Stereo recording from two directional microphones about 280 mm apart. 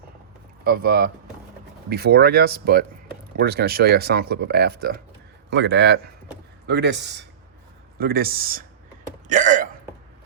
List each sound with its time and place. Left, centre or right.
0.6 s speech: right
9.2 s hiccup: right